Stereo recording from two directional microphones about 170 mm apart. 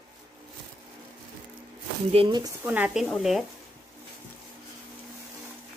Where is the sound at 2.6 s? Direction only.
10° right (ahead or behind).